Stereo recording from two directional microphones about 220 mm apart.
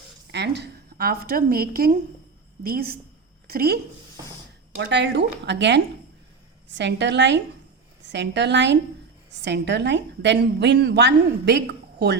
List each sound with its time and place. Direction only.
0.3 s a woman's voice: 50° right (ahead or behind)
4.8 s a woman's voice: 50° right (ahead or behind)